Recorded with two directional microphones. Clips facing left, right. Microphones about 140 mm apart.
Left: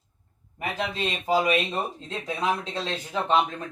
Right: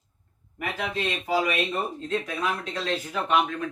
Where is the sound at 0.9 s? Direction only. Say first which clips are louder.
Left 1 dB; 20° left (ahead or behind).